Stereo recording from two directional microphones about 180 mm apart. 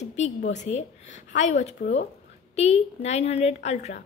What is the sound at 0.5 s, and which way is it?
A woman's voice, 40° left (ahead or behind).